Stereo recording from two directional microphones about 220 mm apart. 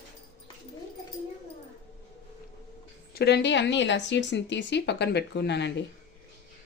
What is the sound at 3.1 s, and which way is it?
A woman's voice, 50° left (ahead or behind).